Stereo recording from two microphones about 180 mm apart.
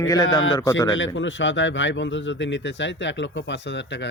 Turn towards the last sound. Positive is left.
turn(degrees=80)